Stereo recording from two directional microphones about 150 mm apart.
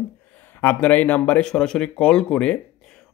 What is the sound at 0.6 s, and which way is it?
A man's voice, 15° left (ahead or behind).